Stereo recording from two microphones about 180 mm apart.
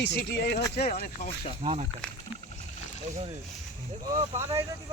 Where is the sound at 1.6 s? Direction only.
35° right (ahead or behind).